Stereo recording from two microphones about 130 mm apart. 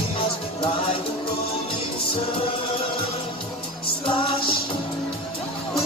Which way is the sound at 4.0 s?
40° left (ahead or behind).